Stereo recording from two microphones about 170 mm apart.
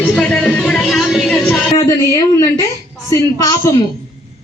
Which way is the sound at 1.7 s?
25° left (ahead or behind).